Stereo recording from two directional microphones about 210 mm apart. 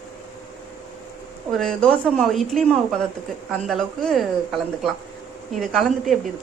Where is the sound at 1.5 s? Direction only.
5° left (ahead or behind).